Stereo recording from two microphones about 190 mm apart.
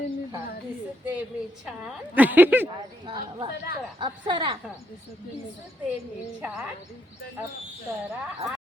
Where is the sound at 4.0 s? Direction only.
25° right (ahead or behind).